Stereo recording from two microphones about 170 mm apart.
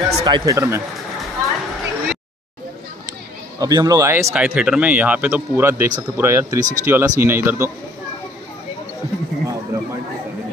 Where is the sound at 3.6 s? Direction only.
20° right (ahead or behind).